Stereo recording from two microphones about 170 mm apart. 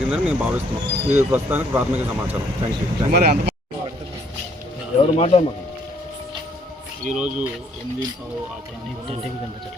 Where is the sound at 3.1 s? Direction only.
60° right (ahead or behind).